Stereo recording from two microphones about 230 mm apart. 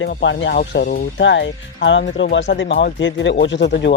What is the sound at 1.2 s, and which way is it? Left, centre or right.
Speech, left.